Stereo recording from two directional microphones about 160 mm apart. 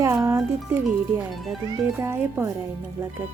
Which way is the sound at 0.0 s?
20° right (ahead or behind).